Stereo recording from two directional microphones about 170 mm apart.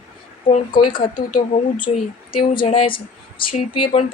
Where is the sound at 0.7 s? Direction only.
30° left (ahead or behind).